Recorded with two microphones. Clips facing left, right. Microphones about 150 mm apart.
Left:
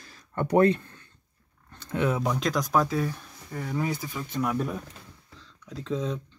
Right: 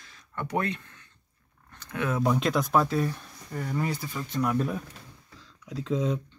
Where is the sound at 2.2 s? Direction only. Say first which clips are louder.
Right 2 dB; centre (ahead or behind).